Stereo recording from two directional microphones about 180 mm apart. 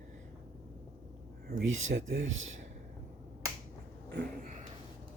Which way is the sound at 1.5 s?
75° right (ahead or behind).